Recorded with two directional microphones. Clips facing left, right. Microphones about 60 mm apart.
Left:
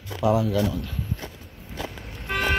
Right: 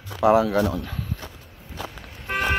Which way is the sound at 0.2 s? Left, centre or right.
Right.